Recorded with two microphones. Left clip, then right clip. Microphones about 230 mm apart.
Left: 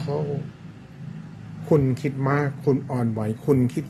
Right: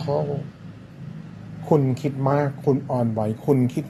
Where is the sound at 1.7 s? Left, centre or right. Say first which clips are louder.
Right 1 dB; centre.